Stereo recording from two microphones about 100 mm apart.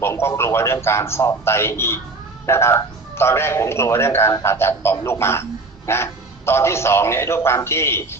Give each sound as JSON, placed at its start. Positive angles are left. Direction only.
{"t": 0.0, "sound": "a man's voice", "side_deg": 25}